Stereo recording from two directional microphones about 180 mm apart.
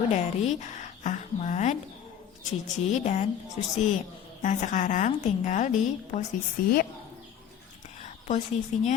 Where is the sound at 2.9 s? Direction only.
40° left (ahead or behind).